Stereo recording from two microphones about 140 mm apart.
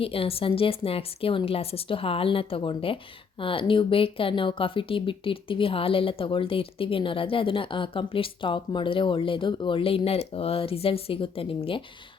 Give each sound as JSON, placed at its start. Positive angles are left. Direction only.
{"t": 0.0, "sound": "a woman's voice", "side_deg": 40}